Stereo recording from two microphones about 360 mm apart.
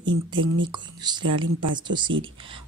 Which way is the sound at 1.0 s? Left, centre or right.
Centre.